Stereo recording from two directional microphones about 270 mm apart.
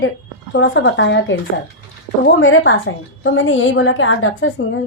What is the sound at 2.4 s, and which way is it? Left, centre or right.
A woman's voice, left.